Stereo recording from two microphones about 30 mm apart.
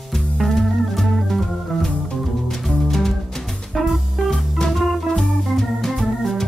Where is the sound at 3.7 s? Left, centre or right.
Centre.